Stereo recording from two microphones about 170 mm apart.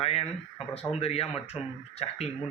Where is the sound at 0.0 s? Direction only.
35° left (ahead or behind).